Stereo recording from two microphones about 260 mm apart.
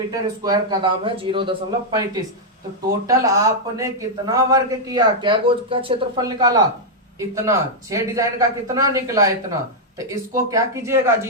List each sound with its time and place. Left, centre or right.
0.1 s a man's voice: centre